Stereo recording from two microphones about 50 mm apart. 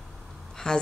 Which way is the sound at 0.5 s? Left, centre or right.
Centre.